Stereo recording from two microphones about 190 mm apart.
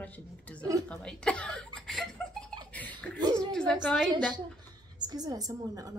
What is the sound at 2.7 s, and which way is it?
Laughter, 10° left (ahead or behind).